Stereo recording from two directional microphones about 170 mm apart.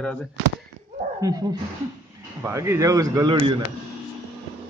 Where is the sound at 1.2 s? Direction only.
20° right (ahead or behind).